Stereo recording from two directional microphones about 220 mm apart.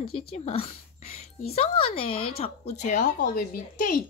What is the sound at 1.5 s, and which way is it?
Speech, 25° left (ahead or behind).